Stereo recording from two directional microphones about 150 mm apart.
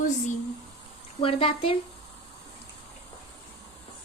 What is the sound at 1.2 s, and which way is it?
Speech, 35° left (ahead or behind).